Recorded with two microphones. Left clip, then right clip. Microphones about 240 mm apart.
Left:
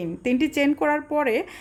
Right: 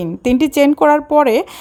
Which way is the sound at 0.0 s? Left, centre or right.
Right.